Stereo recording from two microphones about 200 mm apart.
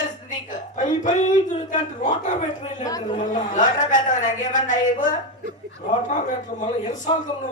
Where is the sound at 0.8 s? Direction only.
40° left (ahead or behind).